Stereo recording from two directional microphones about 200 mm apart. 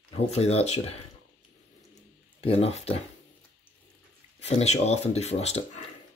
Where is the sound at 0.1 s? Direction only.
30° left (ahead or behind).